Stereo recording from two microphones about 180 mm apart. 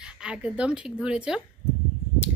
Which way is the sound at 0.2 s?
5° right (ahead or behind).